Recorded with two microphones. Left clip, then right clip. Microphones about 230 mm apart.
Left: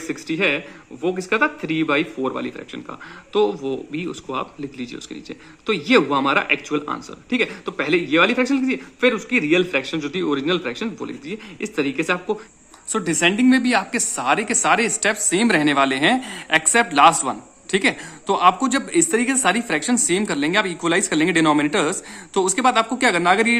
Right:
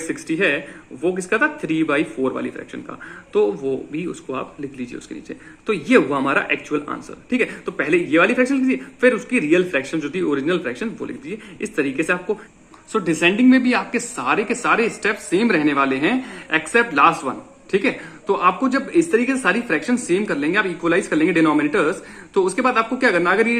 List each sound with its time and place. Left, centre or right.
0.3 s a man's voice: left